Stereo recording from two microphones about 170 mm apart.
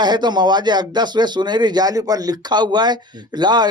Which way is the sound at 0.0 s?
25° right (ahead or behind).